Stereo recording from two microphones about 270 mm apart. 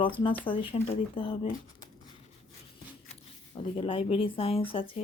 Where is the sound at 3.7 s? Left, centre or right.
Centre.